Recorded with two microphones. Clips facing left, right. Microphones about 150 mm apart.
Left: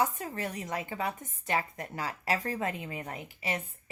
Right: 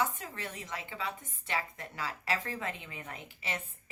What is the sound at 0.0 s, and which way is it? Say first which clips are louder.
A woman's voice: left 4 dB; 40° left (ahead or behind).